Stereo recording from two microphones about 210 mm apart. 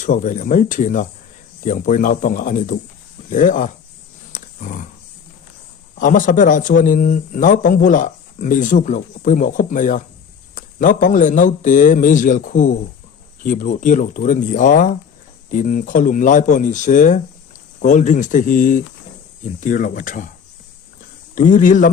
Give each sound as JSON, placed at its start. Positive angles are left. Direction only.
{"t": 0.0, "sound": "speech", "side_deg": 40}
{"t": 4.3, "sound": "dog", "side_deg": 35}
{"t": 6.0, "sound": "speech", "side_deg": 40}
{"t": 21.3, "sound": "speech", "side_deg": 40}